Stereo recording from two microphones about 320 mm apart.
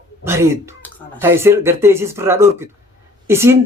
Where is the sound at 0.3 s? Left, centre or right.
Centre.